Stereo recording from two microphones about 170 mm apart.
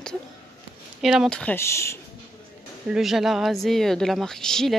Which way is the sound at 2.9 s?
Centre (ahead or behind).